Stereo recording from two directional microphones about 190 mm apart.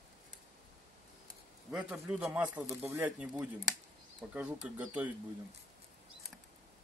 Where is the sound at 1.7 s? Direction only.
5° right (ahead or behind).